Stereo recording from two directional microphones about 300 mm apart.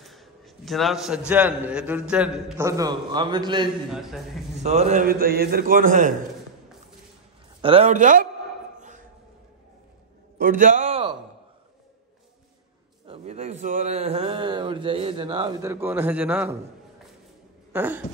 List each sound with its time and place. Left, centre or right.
0.0 s a sound: centre
1.3 s a man's voice: centre
3.9 s a man's voice: centre
4.6 s a man's voice: right
7.6 s a man's voice: centre
10.4 s a sound: right
13.0 s a man's voice: centre
17.7 s a man's voice: centre